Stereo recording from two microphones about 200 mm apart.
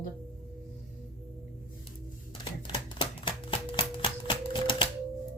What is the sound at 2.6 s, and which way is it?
Typewriter, 25° left (ahead or behind).